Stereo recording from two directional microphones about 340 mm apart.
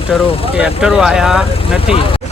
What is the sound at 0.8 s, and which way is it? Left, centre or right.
Speech, centre.